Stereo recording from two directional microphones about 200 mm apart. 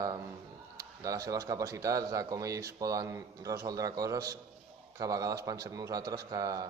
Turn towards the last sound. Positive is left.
turn(degrees=-20)  # may be behind; listen again after turning